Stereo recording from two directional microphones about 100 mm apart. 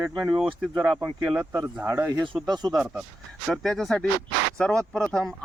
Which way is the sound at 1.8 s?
25° right (ahead or behind).